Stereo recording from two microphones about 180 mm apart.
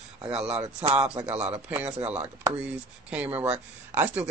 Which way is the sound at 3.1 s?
10° right (ahead or behind).